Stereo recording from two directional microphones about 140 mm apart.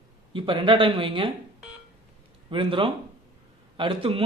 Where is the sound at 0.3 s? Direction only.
40° right (ahead or behind).